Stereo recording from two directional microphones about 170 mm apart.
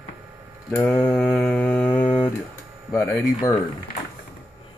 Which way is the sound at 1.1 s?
Centre (ahead or behind).